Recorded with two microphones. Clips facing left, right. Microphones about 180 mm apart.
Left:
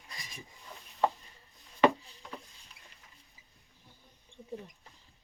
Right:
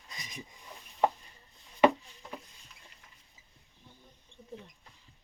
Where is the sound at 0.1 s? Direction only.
20° right (ahead or behind).